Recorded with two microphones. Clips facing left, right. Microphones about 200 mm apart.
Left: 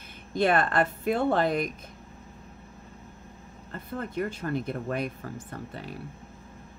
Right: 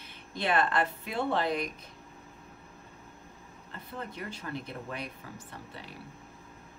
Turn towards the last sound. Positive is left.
turn(degrees=50)  # may be behind; listen again after turning